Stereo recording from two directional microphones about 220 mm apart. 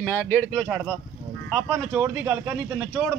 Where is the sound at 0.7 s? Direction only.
5° right (ahead or behind).